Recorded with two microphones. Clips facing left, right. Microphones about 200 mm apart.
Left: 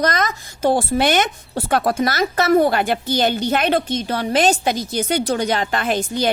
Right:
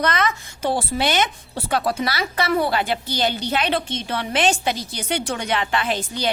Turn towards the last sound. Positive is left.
turn(degrees=45)  # may be behind; listen again after turning